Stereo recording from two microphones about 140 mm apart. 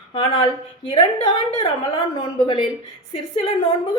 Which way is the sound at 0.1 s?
40° left (ahead or behind).